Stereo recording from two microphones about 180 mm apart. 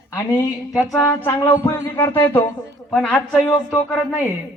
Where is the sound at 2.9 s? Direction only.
5° left (ahead or behind).